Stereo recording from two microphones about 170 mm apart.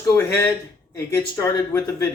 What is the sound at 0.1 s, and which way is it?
Speech, 20° left (ahead or behind).